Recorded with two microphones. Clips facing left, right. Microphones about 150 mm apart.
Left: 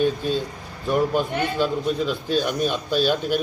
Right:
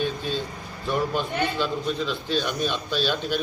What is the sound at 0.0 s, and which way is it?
A man's voice, 45° left (ahead or behind).